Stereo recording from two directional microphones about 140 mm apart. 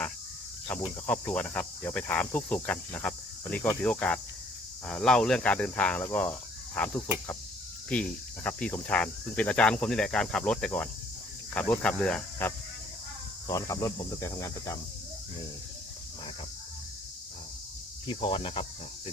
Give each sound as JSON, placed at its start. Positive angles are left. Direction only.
{"t": 0.7, "sound": "speech", "side_deg": 10}
{"t": 13.5, "sound": "speech", "side_deg": 25}
{"t": 18.0, "sound": "speech", "side_deg": 35}